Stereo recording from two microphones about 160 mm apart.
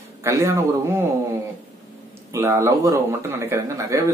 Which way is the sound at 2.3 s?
15° right (ahead or behind).